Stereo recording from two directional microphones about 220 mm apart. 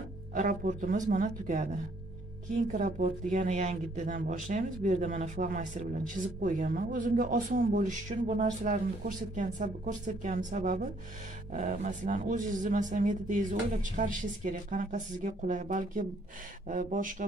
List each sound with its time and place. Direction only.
0.3 s speech: 35° right (ahead or behind)